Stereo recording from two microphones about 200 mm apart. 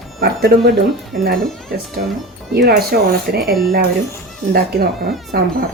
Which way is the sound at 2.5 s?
55° right (ahead or behind).